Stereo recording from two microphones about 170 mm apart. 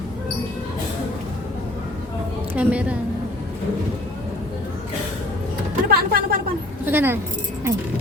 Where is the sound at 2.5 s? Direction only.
10° right (ahead or behind).